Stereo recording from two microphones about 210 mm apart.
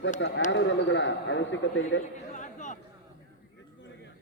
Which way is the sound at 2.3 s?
35° left (ahead or behind).